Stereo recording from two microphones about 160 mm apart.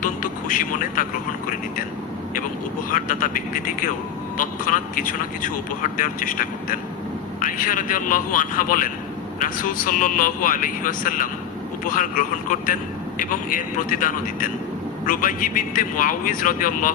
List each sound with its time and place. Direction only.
0.0 s speech: 55° left (ahead or behind)
2.9 s a man's voice: 55° left (ahead or behind)